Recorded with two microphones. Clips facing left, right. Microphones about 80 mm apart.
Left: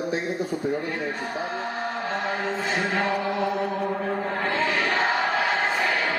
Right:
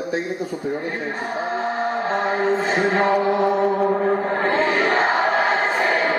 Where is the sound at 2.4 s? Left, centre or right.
Right.